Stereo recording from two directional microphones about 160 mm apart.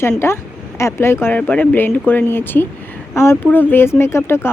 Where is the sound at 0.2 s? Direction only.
15° left (ahead or behind).